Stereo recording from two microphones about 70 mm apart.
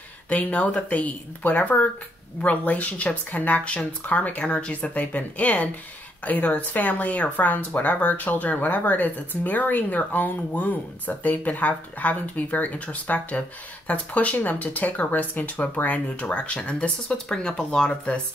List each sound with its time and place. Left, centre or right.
0.3 s speech: centre